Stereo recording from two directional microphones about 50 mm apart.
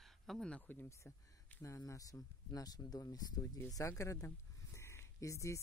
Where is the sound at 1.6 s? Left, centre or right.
Left.